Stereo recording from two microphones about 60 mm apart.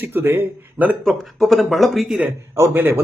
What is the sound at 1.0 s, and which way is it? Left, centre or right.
Speech, centre.